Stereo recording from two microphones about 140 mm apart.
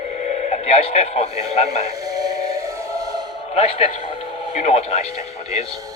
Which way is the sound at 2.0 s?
25° right (ahead or behind).